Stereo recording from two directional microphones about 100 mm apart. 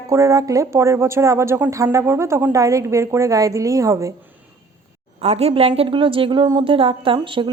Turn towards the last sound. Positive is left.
turn(degrees=-55)  # may be behind; listen again after turning